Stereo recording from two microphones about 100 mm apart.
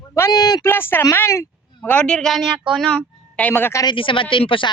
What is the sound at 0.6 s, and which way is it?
Speech, 25° left (ahead or behind).